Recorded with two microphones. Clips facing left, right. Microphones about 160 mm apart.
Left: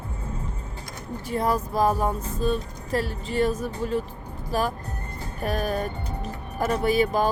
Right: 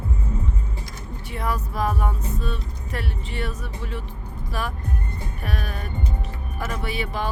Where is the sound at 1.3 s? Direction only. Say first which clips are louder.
Left 4 dB; 40° left (ahead or behind).